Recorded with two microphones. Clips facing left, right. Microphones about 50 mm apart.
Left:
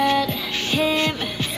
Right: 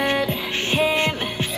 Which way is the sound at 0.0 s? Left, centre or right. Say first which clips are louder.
Left 2 dB; right.